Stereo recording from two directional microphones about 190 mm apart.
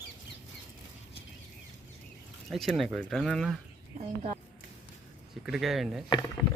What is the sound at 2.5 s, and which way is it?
Speech, centre (ahead or behind).